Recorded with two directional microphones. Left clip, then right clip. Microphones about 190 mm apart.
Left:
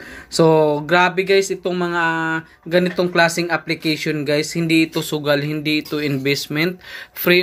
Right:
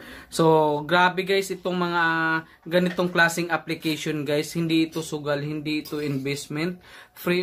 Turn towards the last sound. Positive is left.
turn(degrees=20)  # may be behind; listen again after turning